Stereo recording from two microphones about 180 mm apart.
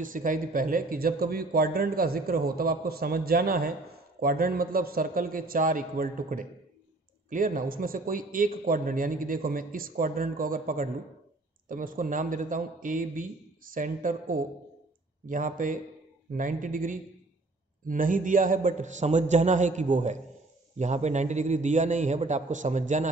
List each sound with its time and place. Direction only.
0.0 s a man's voice: 50° right (ahead or behind)